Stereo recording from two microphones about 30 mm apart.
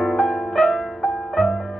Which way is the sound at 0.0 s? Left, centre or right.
Left.